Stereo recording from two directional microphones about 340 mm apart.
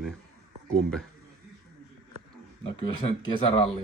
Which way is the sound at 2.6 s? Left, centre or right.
Centre.